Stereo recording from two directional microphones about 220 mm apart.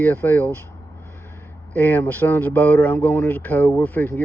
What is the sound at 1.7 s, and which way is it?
Speech, 10° left (ahead or behind).